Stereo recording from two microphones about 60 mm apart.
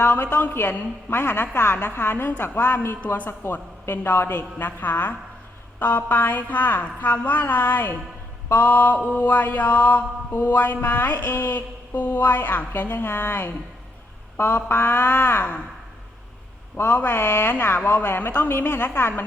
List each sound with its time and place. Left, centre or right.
0.0 s mantra: left
16.7 s speech: left
17.5 s mantra: left